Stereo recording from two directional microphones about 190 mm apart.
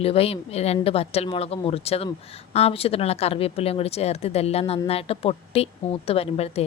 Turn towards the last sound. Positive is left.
turn(degrees=30)  # may be behind; listen again after turning